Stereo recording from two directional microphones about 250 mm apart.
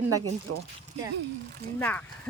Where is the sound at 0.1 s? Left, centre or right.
Right.